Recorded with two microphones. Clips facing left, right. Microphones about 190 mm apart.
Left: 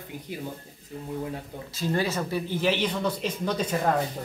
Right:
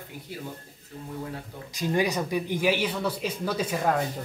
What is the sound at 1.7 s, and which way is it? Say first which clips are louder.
Speech: right 2 dB; 15° right (ahead or behind).